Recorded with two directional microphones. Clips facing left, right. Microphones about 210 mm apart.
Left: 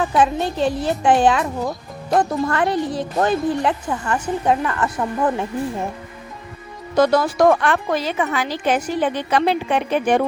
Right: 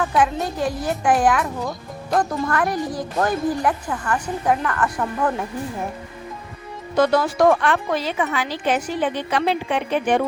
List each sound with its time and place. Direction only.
0.0 s a woman's voice: 25° left (ahead or behind)
6.9 s speech: 40° left (ahead or behind)